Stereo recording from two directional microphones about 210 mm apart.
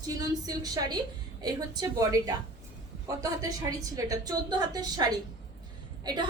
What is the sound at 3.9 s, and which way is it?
A woman's voice, 15° right (ahead or behind).